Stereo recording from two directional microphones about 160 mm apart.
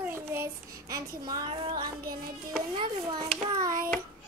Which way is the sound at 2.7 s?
25° right (ahead or behind).